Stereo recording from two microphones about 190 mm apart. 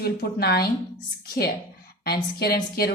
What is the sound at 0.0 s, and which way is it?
Speech, 55° left (ahead or behind).